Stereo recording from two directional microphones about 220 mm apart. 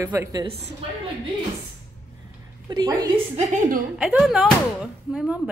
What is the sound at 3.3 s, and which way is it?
Speech, 35° right (ahead or behind).